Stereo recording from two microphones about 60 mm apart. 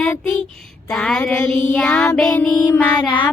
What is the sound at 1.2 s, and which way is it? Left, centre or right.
Child singing, left.